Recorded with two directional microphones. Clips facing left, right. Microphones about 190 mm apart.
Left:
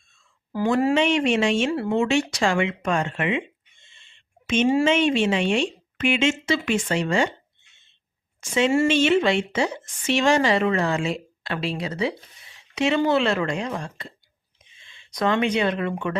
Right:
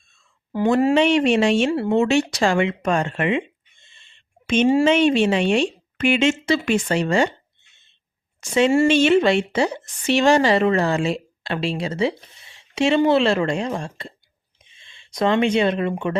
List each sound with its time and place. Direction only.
0.9 s a woman's voice: 35° right (ahead or behind)
4.4 s a woman's voice: 35° right (ahead or behind)
8.4 s a woman's voice: 40° right (ahead or behind); by 16.1 s 25° right (ahead or behind)